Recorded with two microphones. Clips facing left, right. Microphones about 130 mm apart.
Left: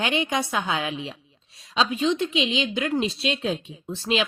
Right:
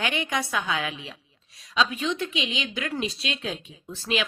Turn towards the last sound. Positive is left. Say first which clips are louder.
# left 3 dB
turn(degrees=25)  # may be behind; listen again after turning